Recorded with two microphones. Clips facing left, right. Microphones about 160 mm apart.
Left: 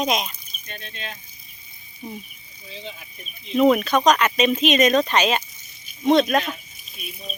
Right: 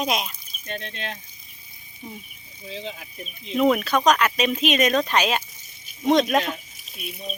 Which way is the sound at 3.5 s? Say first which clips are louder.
Left 3 dB; centre (ahead or behind).